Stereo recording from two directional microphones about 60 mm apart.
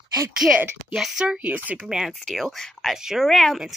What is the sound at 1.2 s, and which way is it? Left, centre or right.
Speech, right.